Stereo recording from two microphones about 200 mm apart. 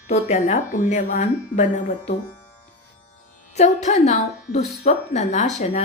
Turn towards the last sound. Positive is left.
turn(degrees=35)  # may be behind; listen again after turning